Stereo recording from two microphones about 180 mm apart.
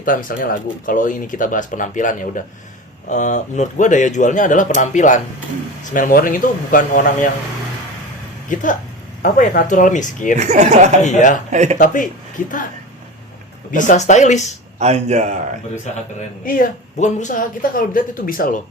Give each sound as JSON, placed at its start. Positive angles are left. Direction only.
{"t": 0.0, "sound": "speech", "side_deg": 50}
{"t": 8.5, "sound": "speech", "side_deg": 45}
{"t": 10.3, "sound": "speech", "side_deg": -40}
{"t": 11.0, "sound": "speech", "side_deg": 45}
{"t": 11.5, "sound": "speech", "side_deg": -40}
{"t": 13.7, "sound": "speech", "side_deg": 45}
{"t": 14.8, "sound": "speech", "side_deg": -40}
{"t": 16.5, "sound": "speech", "side_deg": 45}